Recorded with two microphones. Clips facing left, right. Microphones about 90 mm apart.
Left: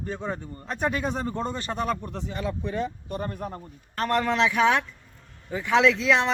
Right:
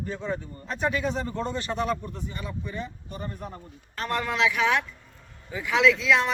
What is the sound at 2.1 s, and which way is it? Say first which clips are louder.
A man's voice: left 5 dB; 90° left.